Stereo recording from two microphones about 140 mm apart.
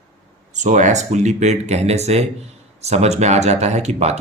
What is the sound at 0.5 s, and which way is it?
Speech, 60° right (ahead or behind).